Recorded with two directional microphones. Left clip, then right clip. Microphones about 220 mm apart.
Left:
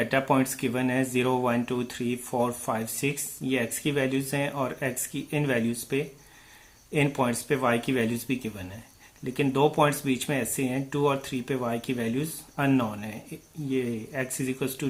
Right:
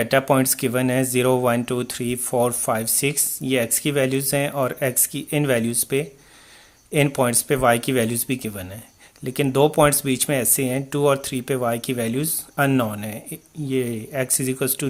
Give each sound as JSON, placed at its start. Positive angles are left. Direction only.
{"t": 0.0, "sound": "speech", "side_deg": -45}